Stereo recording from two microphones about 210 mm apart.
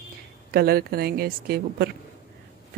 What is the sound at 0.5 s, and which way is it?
A woman's voice, 45° right (ahead or behind).